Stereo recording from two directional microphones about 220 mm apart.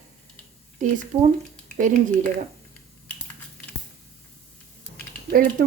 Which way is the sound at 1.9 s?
35° right (ahead or behind).